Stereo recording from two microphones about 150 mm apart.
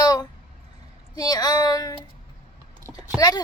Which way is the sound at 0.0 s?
25° left (ahead or behind).